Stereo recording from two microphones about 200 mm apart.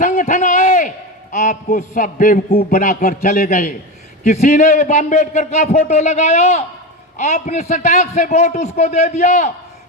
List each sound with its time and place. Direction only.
0.0 s a man's voice: 40° left (ahead or behind)